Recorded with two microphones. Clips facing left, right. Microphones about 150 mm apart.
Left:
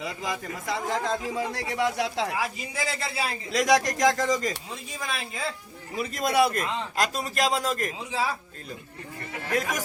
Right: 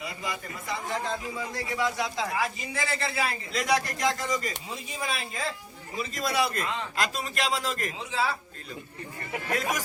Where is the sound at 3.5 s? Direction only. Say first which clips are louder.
Left 7 dB; 85° left.